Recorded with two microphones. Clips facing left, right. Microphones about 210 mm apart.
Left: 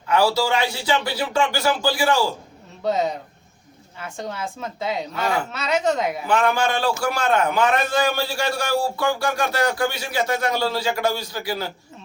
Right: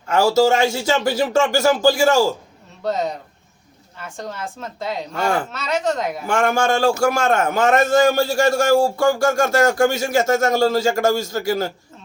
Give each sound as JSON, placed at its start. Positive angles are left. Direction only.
{"t": 0.1, "sound": "a man's voice", "side_deg": -45}
{"t": 2.8, "sound": "speech", "side_deg": 0}
{"t": 5.1, "sound": "a man's voice", "side_deg": -50}
{"t": 5.5, "sound": "speech", "side_deg": 0}
{"t": 6.2, "sound": "a man's voice", "side_deg": -45}